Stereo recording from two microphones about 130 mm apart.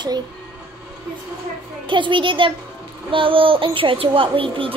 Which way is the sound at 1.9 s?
40° right (ahead or behind).